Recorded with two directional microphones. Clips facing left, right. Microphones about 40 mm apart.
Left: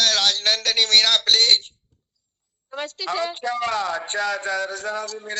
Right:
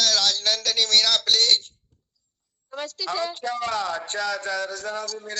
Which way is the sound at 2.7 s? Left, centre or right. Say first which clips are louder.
Left 2 dB; left.